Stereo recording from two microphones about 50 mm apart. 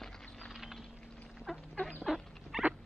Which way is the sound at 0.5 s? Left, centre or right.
Centre.